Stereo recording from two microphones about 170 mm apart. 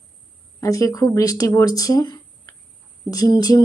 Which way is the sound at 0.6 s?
20° left (ahead or behind).